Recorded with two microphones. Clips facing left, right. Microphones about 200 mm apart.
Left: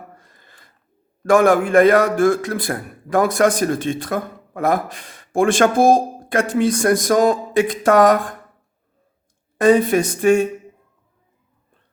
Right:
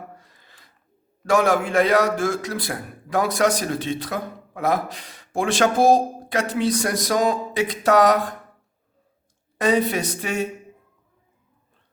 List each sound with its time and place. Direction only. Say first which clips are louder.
0.2 s a sound: left 2 dB; 50° left (ahead or behind)
1.2 s a man's voice: left 5 dB; 50° left (ahead or behind)
9.6 s a man's voice: left 6 dB; 50° left (ahead or behind)